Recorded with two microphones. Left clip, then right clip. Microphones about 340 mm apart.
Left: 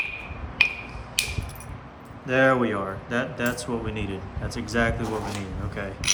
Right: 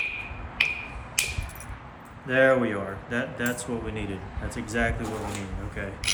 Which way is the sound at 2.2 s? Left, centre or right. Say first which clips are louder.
Even; centre.